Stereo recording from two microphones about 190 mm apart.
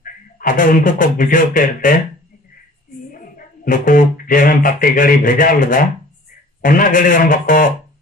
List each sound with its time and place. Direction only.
0.0 s speech: 45° left (ahead or behind)
3.1 s a man's voice: 45° left (ahead or behind)